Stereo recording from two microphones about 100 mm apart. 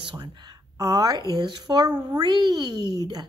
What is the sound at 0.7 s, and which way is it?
A child's voice, 35° right (ahead or behind).